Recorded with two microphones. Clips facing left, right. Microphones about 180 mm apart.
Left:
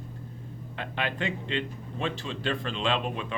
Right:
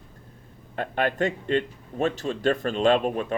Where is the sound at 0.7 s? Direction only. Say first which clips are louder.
Right 7 dB; 50° right (ahead or behind).